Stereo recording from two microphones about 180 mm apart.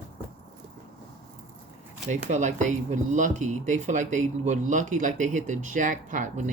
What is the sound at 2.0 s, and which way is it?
Speech, 40° right (ahead or behind).